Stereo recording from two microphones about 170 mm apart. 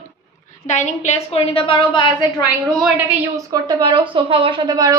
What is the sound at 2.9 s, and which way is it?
A woman's voice, 20° right (ahead or behind).